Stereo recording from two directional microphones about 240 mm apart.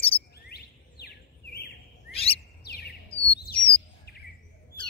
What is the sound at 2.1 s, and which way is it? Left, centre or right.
Chirp, left.